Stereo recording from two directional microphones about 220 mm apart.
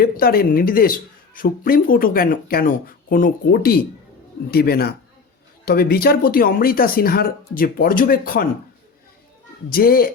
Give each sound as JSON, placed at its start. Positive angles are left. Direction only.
{"t": 0.0, "sound": "speech", "side_deg": 45}
{"t": 9.6, "sound": "speech", "side_deg": 40}